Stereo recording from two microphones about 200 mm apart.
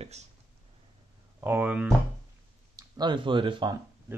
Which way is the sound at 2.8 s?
20° right (ahead or behind).